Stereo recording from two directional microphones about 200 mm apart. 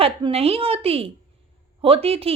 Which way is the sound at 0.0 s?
30° right (ahead or behind).